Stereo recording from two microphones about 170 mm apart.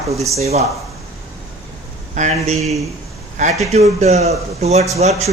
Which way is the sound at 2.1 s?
45° right (ahead or behind).